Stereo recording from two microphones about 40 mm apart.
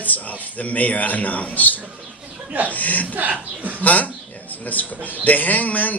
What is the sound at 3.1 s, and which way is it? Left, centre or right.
Speech, right.